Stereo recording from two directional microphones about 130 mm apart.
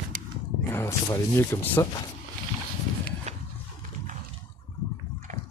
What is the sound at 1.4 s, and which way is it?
Speech, 20° left (ahead or behind).